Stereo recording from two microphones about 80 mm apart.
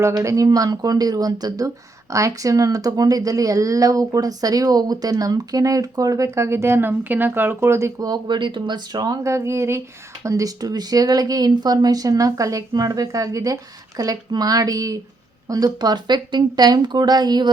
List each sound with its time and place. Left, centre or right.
0.0 s speech: right
8.0 s speech: right
8.4 s speech: right
9.2 s speech: right
10.2 s speech: right